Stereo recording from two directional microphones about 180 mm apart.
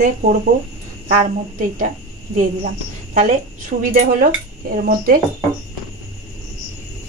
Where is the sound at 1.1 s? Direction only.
45° right (ahead or behind).